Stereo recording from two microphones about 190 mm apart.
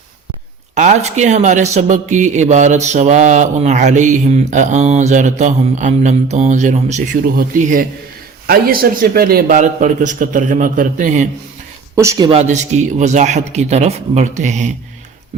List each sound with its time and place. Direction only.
0.8 s a man's voice: 40° right (ahead or behind)
11.9 s speech: 20° right (ahead or behind)
12.4 s speech: 35° right (ahead or behind)